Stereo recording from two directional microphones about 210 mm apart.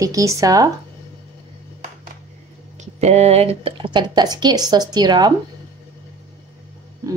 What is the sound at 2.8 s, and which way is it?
A woman's voice, 30° right (ahead or behind).